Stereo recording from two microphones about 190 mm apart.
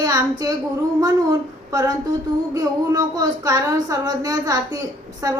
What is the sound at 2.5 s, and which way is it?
A woman's voice, 20° right (ahead or behind).